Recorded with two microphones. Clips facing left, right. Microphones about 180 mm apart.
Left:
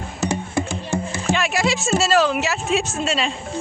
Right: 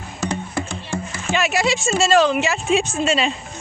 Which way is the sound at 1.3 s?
Centre (ahead or behind).